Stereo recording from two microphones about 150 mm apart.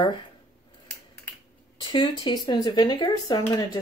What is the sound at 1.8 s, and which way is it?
Speech, 30° left (ahead or behind).